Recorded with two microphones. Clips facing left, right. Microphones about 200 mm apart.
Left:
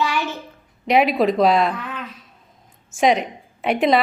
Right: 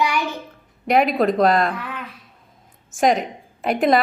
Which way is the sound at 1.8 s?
10° right (ahead or behind).